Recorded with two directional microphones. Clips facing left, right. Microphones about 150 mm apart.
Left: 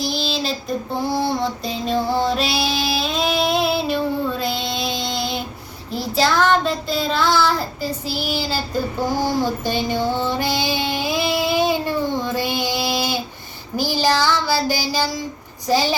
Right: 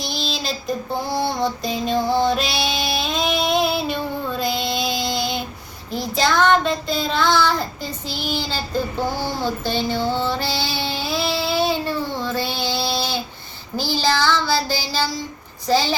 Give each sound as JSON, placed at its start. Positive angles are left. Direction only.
{"t": 0.0, "sound": "child singing", "side_deg": 0}
{"t": 1.1, "sound": "music", "side_deg": 0}
{"t": 5.9, "sound": "child singing", "side_deg": 0}